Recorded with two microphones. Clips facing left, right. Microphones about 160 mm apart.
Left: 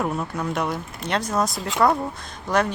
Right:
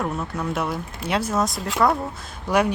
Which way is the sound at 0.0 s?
Centre (ahead or behind).